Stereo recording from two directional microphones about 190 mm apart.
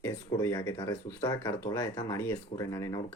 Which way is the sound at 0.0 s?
15° left (ahead or behind).